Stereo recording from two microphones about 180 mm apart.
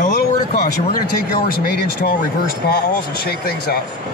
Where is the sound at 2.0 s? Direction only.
55° left (ahead or behind).